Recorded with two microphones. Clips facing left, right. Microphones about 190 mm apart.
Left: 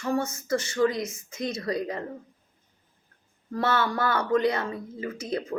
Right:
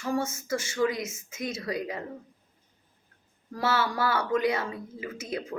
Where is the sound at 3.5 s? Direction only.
5° right (ahead or behind).